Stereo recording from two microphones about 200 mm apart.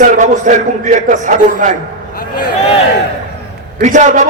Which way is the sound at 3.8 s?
35° right (ahead or behind).